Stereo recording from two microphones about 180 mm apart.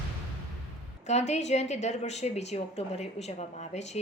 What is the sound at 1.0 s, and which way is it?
A woman's voice, 40° left (ahead or behind).